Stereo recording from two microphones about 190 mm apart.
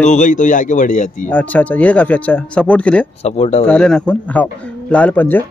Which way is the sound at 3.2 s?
35° left (ahead or behind).